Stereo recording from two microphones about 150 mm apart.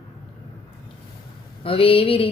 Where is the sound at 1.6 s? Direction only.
40° left (ahead or behind).